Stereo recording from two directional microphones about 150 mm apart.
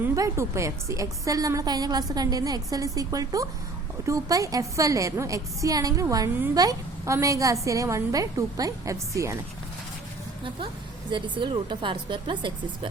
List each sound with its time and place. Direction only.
0.0 s a woman's voice: 20° right (ahead or behind)
11.1 s a woman's voice: 35° right (ahead or behind)